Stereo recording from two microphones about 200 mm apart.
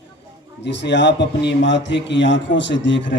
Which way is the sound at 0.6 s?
60° left (ahead or behind).